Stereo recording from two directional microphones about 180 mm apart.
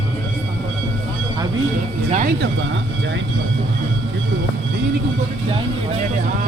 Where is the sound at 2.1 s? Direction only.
50° right (ahead or behind).